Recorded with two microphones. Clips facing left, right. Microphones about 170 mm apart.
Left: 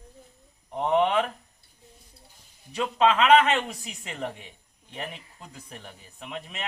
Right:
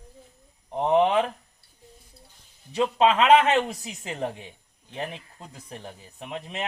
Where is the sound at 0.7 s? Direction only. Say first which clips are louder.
Right 2 dB; 30° right (ahead or behind).